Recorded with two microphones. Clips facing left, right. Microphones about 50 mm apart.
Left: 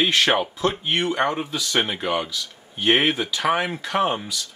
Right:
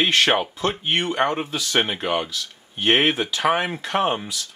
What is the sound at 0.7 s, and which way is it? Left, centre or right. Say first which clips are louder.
Speech: even; centre.